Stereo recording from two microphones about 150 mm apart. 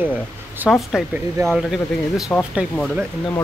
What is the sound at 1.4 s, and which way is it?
Speech, centre (ahead or behind).